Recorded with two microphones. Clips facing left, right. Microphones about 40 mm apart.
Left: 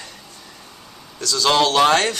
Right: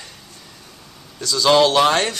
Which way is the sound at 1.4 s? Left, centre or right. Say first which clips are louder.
Right 2 dB; centre.